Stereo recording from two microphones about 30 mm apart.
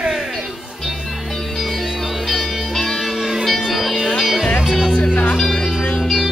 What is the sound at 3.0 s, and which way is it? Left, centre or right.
Music, centre.